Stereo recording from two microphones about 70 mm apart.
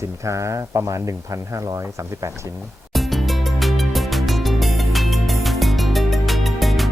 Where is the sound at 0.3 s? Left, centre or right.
Right.